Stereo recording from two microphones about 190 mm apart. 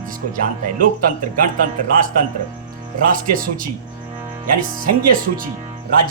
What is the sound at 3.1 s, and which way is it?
Speech, 45° right (ahead or behind).